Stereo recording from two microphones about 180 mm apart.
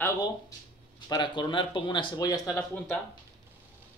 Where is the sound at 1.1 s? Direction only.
25° left (ahead or behind).